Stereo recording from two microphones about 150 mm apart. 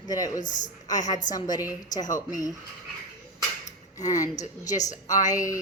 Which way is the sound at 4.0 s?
25° left (ahead or behind).